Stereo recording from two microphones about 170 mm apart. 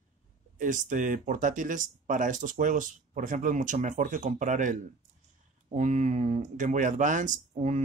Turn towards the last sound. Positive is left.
turn(degrees=-45)  # may be behind; listen again after turning